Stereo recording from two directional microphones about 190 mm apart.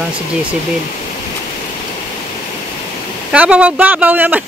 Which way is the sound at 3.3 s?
5° right (ahead or behind).